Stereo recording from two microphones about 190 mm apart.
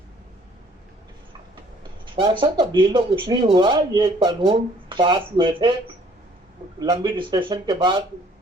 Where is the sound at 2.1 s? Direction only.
25° right (ahead or behind).